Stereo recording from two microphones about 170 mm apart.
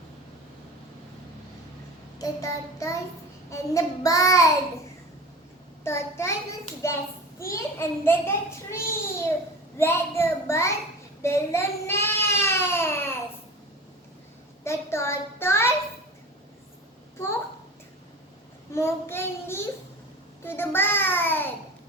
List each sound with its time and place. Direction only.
2.1 s child singing: 20° left (ahead or behind)
5.8 s hands: 15° left (ahead or behind)
11.2 s child singing: 15° left (ahead or behind)
14.6 s hands: 15° left (ahead or behind)
18.7 s hands: 15° left (ahead or behind)